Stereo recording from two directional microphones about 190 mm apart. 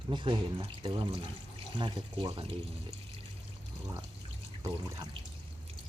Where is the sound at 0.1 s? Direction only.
25° right (ahead or behind).